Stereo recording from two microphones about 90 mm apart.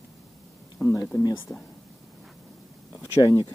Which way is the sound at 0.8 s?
35° left (ahead or behind).